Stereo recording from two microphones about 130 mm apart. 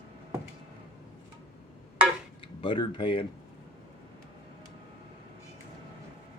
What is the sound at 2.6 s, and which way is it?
Speech, 40° left (ahead or behind).